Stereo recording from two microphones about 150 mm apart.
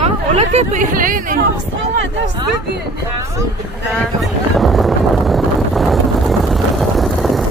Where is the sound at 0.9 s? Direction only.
70° right (ahead or behind).